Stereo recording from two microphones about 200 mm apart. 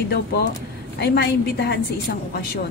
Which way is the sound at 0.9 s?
55° left (ahead or behind).